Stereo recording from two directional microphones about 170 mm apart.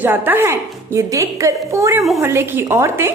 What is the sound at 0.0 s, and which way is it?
A woman's voice, 10° right (ahead or behind).